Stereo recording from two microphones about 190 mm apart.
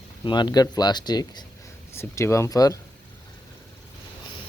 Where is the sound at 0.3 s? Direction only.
25° left (ahead or behind).